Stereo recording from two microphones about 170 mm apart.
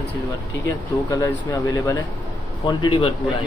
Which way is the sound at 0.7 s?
25° left (ahead or behind).